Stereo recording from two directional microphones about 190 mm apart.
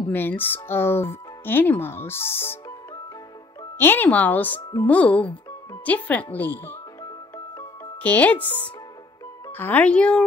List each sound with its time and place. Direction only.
0.1 s speech: 10° left (ahead or behind)
3.7 s speech: 10° left (ahead or behind)
8.0 s speech: 10° left (ahead or behind)